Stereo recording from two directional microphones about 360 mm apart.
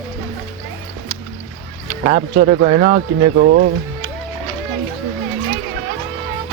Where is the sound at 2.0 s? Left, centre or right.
Centre.